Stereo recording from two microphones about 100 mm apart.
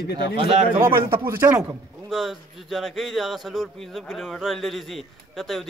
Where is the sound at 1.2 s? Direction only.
30° right (ahead or behind).